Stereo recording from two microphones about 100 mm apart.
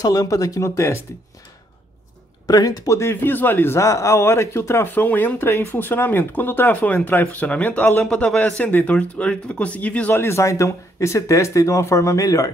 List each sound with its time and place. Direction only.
0.0 s speech: 35° left (ahead or behind)
2.4 s a man's voice: 40° left (ahead or behind); by 8.0 s 15° left (ahead or behind)
8.0 s a man's voice: 5° left (ahead or behind); by 12.4 s 35° left (ahead or behind)